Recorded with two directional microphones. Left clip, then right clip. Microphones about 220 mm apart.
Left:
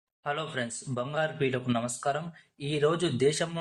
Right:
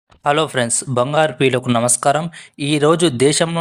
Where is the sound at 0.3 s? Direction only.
45° right (ahead or behind).